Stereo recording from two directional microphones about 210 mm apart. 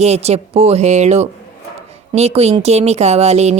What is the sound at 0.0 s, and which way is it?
Speech, 30° right (ahead or behind).